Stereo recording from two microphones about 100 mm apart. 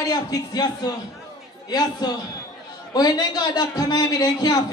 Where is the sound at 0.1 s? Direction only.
40° left (ahead or behind).